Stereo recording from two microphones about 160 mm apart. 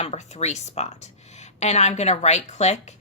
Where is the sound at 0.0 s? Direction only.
40° left (ahead or behind).